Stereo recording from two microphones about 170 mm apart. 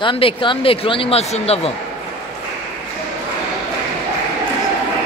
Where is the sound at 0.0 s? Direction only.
30° left (ahead or behind).